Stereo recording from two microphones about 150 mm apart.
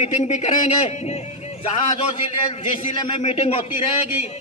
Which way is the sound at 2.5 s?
35° left (ahead or behind).